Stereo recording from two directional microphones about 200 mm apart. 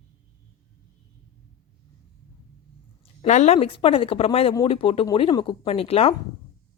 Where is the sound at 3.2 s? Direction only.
35° left (ahead or behind).